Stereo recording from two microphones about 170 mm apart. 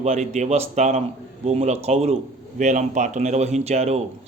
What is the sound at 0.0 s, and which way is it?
Speech, 40° right (ahead or behind).